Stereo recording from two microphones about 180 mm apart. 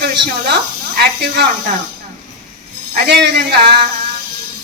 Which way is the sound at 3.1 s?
65° right (ahead or behind).